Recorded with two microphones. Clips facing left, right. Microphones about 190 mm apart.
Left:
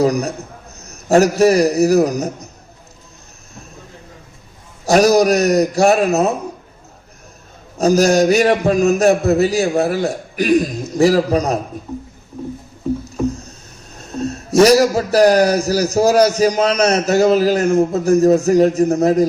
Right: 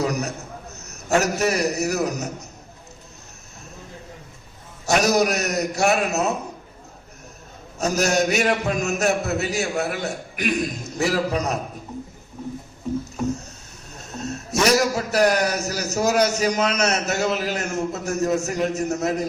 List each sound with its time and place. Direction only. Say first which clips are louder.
0.0 s a man's voice: left 8 dB; 35° left (ahead or behind)
4.9 s a man's voice: left 8 dB; 35° left (ahead or behind)
7.8 s a man's voice: left 9 dB; 35° left (ahead or behind)
14.2 s a man's voice: left 11 dB; 35° left (ahead or behind)